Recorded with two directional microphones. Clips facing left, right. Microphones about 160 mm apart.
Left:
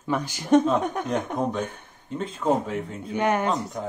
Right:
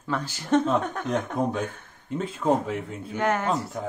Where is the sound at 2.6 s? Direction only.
Centre (ahead or behind).